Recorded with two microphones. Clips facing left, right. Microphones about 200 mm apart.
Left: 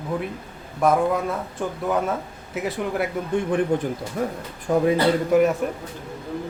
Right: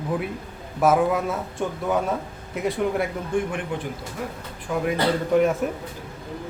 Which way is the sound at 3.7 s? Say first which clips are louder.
Left 6 dB; 40° left (ahead or behind).